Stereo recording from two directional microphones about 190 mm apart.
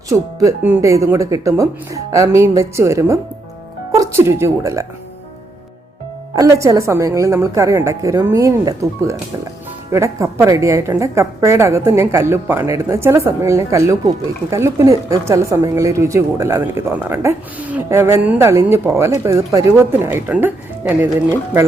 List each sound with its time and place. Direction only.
0.1 s a woman's voice: 15° right (ahead or behind)
6.3 s a woman's voice: 15° right (ahead or behind)